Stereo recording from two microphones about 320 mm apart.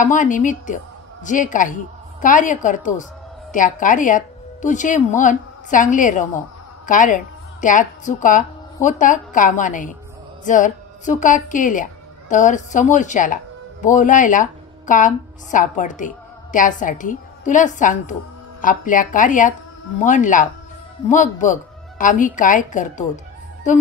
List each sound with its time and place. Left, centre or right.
0.0 s a woman's voice: left